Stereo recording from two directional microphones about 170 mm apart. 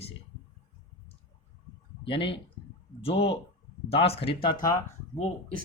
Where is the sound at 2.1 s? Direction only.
30° left (ahead or behind).